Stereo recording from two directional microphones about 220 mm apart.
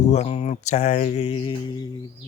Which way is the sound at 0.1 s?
30° left (ahead or behind).